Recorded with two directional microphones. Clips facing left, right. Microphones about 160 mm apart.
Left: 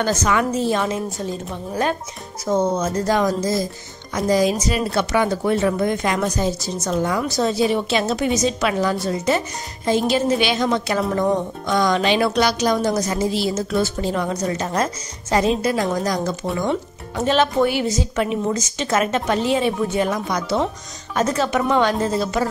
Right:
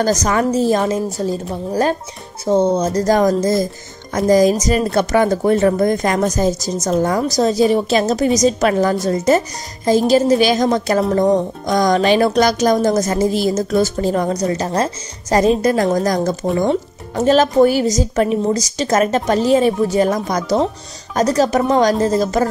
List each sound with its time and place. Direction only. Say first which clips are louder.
0.0 s speech: right 4 dB; 40° right (ahead or behind)